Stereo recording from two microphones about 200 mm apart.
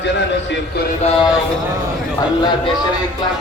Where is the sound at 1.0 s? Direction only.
20° left (ahead or behind).